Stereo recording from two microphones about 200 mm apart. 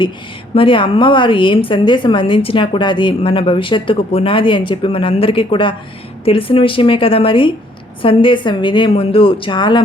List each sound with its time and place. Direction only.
0.5 s a woman's voice: 25° left (ahead or behind)